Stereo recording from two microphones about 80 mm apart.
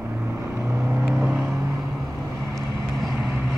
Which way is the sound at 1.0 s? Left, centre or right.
Centre.